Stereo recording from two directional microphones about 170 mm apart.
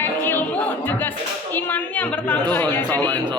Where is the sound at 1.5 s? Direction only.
10° left (ahead or behind).